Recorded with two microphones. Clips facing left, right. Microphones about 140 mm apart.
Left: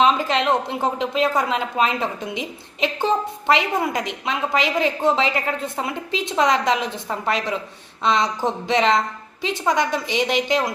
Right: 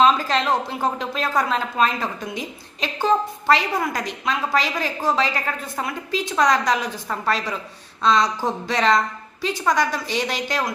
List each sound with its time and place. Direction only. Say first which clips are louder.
0.0 s speech: even; 20° left (ahead or behind)